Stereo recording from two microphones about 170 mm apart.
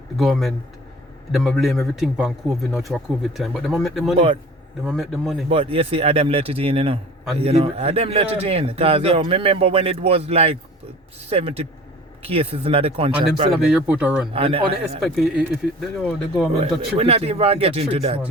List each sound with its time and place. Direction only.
0.2 s a man's voice: centre (ahead or behind)
5.5 s a man's voice: 30° right (ahead or behind)
13.5 s speech: 5° right (ahead or behind)
14.3 s a man's voice: 35° right (ahead or behind)
15.0 s a man's voice: centre (ahead or behind)
16.6 s a man's voice: 35° right (ahead or behind)